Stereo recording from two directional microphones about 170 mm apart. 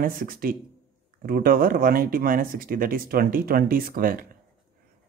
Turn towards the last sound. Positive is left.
turn(degrees=-55)  # may be behind; listen again after turning